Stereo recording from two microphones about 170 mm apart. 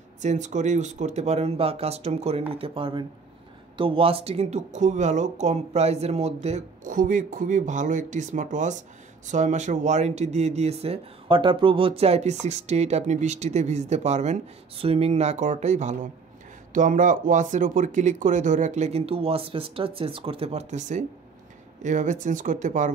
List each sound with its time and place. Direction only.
0.2 s speech: 45° right (ahead or behind)